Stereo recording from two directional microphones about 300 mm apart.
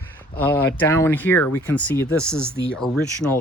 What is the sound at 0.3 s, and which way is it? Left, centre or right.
Speech, centre.